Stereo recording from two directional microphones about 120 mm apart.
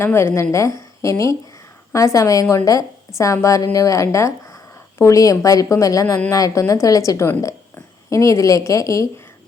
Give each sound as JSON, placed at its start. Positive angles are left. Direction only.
{"t": 0.0, "sound": "a woman's voice", "side_deg": 20}